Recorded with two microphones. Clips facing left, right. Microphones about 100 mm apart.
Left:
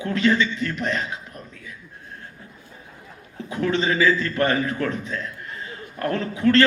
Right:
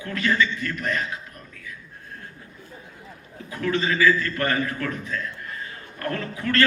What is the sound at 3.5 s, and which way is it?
A man's voice, 20° left (ahead or behind).